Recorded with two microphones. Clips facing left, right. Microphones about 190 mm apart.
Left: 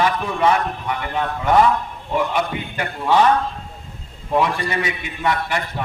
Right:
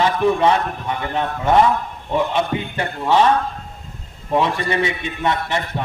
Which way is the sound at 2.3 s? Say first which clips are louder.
Right 2 dB; 25° right (ahead or behind).